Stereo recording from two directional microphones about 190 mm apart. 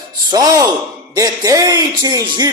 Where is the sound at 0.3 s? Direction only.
20° right (ahead or behind).